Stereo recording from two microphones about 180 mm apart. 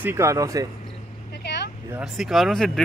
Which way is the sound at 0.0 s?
15° right (ahead or behind).